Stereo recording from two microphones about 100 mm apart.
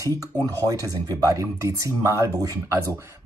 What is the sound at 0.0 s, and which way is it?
Speech, 35° right (ahead or behind).